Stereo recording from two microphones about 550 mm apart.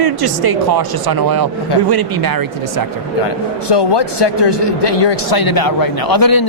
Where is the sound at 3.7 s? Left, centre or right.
Left.